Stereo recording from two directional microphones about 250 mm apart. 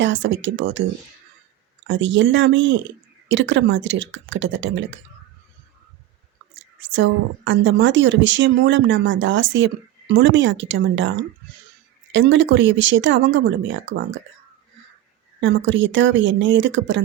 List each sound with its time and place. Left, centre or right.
0.0 s a woman's voice: right
1.9 s a woman's voice: right
6.5 s a woman's voice: right
15.4 s a woman's voice: right